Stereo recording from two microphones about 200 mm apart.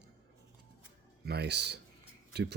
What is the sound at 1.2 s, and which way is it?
Speech, 55° right (ahead or behind).